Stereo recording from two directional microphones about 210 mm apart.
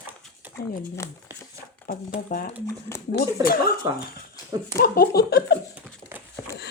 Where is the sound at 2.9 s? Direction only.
10° left (ahead or behind).